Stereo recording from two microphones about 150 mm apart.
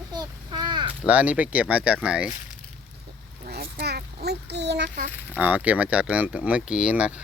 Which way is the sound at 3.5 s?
90° right.